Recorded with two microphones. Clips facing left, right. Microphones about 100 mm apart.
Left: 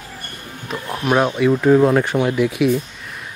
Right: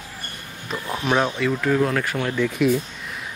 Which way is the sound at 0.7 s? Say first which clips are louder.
Left 3 dB; centre (ahead or behind).